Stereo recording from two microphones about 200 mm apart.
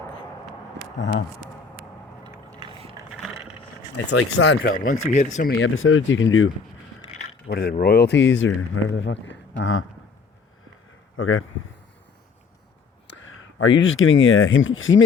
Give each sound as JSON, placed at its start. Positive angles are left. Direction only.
{"t": 0.9, "sound": "speech", "side_deg": 65}
{"t": 2.2, "sound": "biting", "side_deg": -25}
{"t": 4.2, "sound": "speech", "side_deg": 90}
{"t": 4.6, "sound": "speech", "side_deg": 45}
{"t": 5.5, "sound": "speech", "side_deg": 80}
{"t": 7.5, "sound": "speech", "side_deg": 50}
{"t": 11.2, "sound": "a man's voice", "side_deg": 85}
{"t": 13.1, "sound": "speech", "side_deg": 70}